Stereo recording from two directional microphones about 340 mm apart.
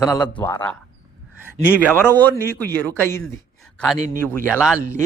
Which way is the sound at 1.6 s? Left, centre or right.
Centre.